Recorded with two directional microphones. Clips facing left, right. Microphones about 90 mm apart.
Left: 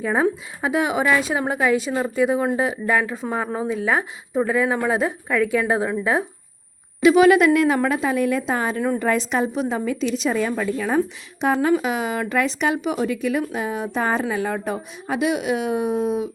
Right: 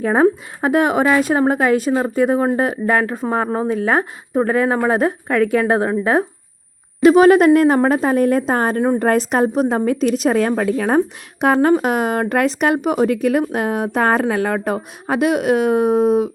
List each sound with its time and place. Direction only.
0.0 s a woman's voice: 50° right (ahead or behind)